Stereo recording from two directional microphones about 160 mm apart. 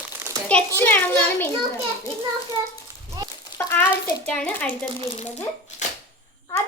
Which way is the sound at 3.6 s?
20° left (ahead or behind).